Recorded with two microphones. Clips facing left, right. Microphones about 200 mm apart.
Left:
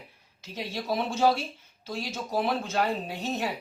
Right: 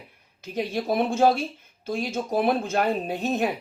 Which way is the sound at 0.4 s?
55° right (ahead or behind).